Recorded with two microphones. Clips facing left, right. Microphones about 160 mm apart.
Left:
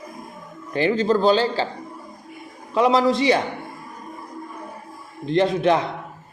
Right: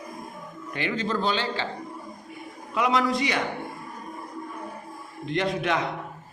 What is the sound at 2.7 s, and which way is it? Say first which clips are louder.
Speech: left 6 dB; 30° left (ahead or behind).